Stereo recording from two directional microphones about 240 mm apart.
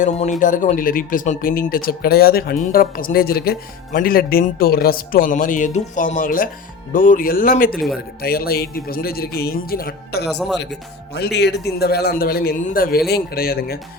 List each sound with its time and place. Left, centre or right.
0.0 s speech: left
7.7 s speech: centre
8.2 s speech: left
10.2 s speech: centre
10.6 s speech: left